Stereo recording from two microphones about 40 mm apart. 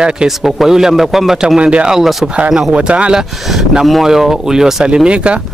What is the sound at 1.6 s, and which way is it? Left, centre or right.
A man's voice, right.